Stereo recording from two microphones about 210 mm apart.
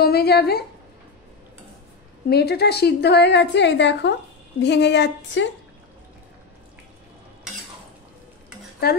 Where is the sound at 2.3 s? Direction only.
50° left (ahead or behind).